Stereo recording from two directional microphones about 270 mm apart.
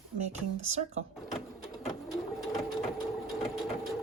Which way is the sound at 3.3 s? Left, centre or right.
Centre.